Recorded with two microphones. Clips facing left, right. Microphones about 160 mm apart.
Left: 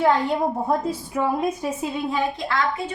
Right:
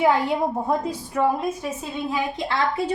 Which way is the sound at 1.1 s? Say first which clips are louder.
Right 3 dB; 5° left (ahead or behind).